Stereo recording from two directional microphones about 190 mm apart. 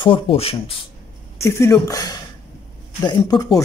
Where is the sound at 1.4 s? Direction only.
15° left (ahead or behind).